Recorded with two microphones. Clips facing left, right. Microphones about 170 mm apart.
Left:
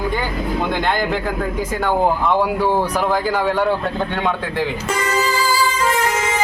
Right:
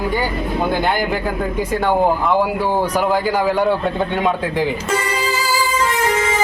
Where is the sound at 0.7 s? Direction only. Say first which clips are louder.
Right 1 dB; 10° right (ahead or behind).